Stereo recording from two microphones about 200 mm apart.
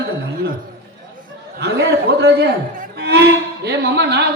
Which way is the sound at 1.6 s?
55° right (ahead or behind).